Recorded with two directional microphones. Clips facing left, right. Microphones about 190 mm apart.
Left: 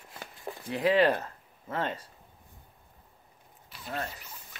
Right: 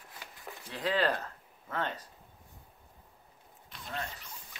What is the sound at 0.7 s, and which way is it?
Speech, 25° left (ahead or behind).